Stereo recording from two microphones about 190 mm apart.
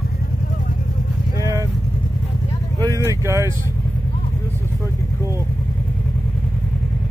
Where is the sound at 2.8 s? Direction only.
15° right (ahead or behind).